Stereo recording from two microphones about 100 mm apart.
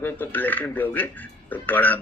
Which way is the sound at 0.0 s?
20° left (ahead or behind).